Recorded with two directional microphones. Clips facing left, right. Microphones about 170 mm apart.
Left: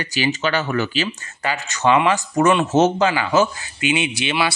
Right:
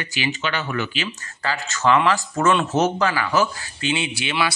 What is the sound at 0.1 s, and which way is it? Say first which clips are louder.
Speech: left 5 dB; 40° left (ahead or behind).